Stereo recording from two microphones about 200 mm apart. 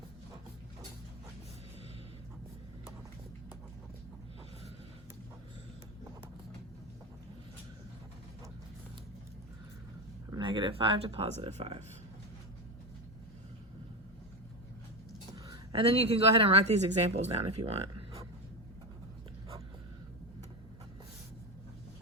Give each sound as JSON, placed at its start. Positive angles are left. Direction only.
{"t": 10.3, "sound": "speech", "side_deg": -25}
{"t": 15.4, "sound": "speech", "side_deg": -25}